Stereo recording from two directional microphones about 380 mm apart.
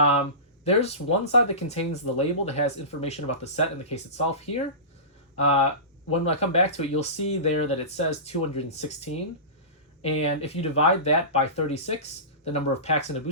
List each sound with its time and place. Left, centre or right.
0.6 s speech: centre